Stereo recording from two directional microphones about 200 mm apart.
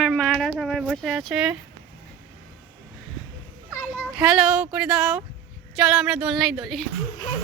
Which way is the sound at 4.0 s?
5° right (ahead or behind).